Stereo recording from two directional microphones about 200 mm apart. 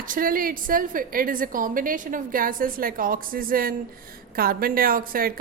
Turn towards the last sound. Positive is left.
turn(degrees=-45)  # may be behind; listen again after turning